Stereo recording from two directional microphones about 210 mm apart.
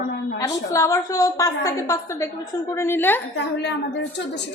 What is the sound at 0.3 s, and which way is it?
Speech, 15° left (ahead or behind).